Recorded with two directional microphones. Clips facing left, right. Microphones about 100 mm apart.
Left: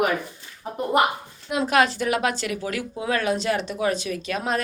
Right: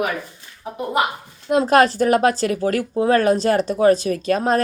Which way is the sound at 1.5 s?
40° right (ahead or behind).